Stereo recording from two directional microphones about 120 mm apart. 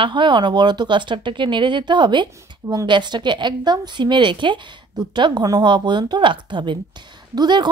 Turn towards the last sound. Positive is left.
turn(degrees=-35)  # may be behind; listen again after turning